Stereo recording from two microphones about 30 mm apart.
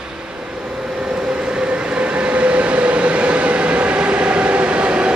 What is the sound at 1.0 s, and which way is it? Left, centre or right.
Train, right.